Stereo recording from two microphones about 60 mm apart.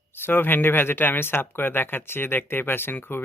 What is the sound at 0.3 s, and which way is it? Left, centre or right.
Speech, left.